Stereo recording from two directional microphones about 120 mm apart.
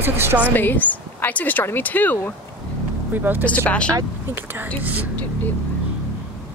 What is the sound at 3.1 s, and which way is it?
Speech, 15° right (ahead or behind).